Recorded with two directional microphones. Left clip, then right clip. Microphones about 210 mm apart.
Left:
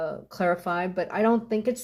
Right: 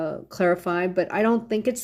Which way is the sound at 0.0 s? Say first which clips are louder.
Right 3 dB; 50° right (ahead or behind).